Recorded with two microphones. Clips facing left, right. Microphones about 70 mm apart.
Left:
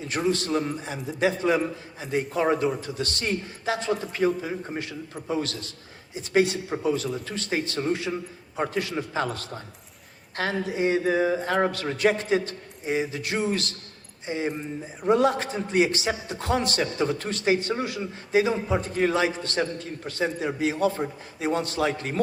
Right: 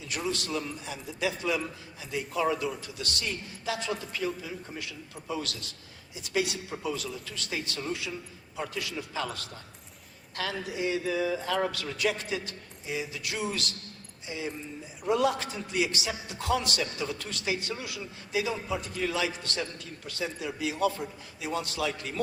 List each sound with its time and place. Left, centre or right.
0.0 s a man's voice: left